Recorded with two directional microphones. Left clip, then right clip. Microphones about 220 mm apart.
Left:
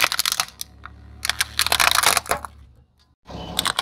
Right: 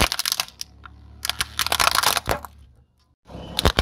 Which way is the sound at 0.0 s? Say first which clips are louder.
Left 2 dB; centre (ahead or behind).